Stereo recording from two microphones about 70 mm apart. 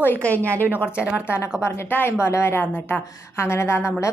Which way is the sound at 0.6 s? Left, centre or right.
Right.